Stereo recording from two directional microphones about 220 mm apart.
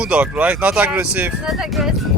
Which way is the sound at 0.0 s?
5° right (ahead or behind).